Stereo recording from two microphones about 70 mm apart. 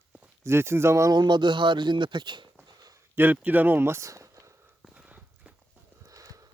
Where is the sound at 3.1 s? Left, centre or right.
Right.